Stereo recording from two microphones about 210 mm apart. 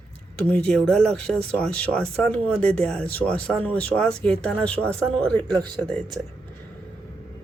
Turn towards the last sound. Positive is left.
turn(degrees=5)  # may be behind; listen again after turning